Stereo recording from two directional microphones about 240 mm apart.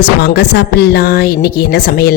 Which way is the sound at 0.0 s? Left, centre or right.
Left.